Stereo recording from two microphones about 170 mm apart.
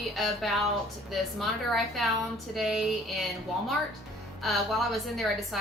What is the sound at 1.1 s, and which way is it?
A woman's voice, centre (ahead or behind).